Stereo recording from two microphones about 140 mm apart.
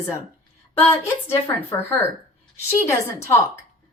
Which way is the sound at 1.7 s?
15° left (ahead or behind).